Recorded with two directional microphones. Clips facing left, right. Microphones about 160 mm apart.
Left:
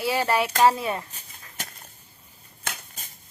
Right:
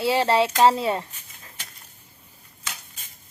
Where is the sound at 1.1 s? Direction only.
35° left (ahead or behind).